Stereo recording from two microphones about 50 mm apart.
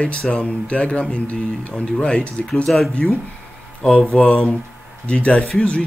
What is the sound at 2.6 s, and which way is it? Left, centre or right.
Speech, centre.